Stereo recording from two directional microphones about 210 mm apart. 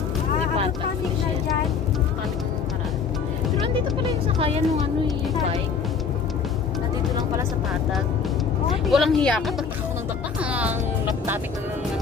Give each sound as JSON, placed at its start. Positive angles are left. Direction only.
{"t": 4.4, "sound": "speech", "side_deg": -25}
{"t": 8.8, "sound": "speech", "side_deg": 0}